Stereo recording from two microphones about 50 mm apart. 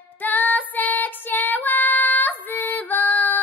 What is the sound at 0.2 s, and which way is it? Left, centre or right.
Female singing, left.